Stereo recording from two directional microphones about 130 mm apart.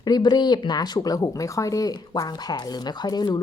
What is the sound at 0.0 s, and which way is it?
A woman's voice, 35° left (ahead or behind).